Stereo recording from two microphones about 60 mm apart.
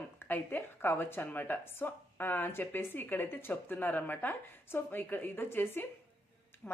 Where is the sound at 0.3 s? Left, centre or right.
Left.